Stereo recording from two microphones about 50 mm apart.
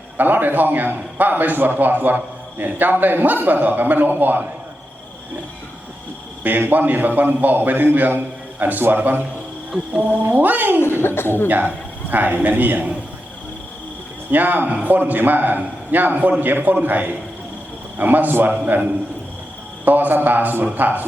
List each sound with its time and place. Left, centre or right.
0.2 s a man's voice: right
6.4 s a man's voice: right
9.7 s a man's voice: right
10.2 s a man's voice: right
11.0 s speech: left
11.4 s a man's voice: right
14.3 s a man's voice: right
18.5 s a man's voice: right